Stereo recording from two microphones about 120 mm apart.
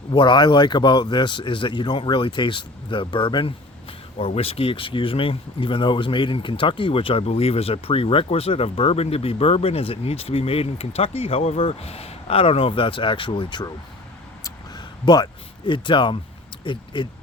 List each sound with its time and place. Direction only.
0.1 s speech: 40° left (ahead or behind)
4.2 s speech: 55° left (ahead or behind); by 13.7 s 40° left (ahead or behind)
14.4 s a sound: 35° left (ahead or behind)
16.6 s speech: 40° left (ahead or behind)